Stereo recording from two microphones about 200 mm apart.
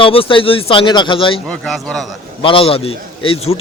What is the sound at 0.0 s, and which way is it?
A man's voice, 25° left (ahead or behind).